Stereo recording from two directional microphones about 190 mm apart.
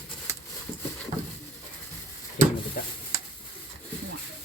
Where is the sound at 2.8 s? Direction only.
45° left (ahead or behind).